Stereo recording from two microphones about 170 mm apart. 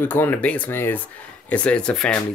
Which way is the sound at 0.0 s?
10° left (ahead or behind).